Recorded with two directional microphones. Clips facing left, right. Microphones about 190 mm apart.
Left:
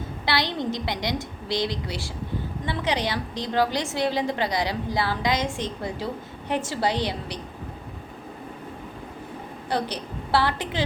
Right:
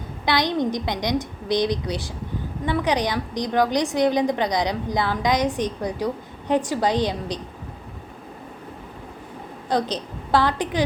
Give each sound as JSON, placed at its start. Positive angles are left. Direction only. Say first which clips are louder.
{"t": 0.3, "sound": "a woman's voice", "louder": "right 5 dB", "side_deg": -20}
{"t": 9.6, "sound": "a woman's voice", "louder": "right 4 dB", "side_deg": -15}